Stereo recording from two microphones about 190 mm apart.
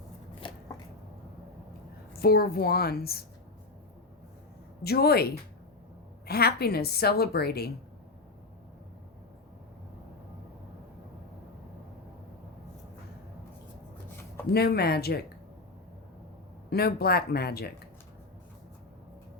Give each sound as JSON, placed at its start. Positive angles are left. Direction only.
{"t": 2.1, "sound": "a woman's voice", "side_deg": 50}
{"t": 4.8, "sound": "a woman's voice", "side_deg": 55}
{"t": 14.5, "sound": "a woman's voice", "side_deg": 55}
{"t": 16.6, "sound": "a woman's voice", "side_deg": 55}